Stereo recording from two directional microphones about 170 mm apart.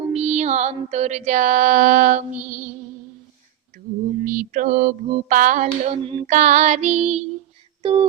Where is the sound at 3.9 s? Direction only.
50° right (ahead or behind).